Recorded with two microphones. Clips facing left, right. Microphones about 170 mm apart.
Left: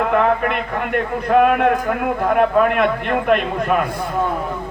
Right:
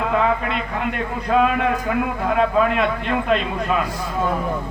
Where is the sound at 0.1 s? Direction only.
60° left (ahead or behind).